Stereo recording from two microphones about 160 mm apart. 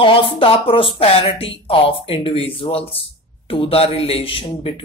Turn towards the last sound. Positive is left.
turn(degrees=35)  # may be behind; listen again after turning